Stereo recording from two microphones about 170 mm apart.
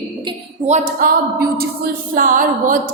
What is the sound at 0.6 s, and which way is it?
Speech, 45° right (ahead or behind).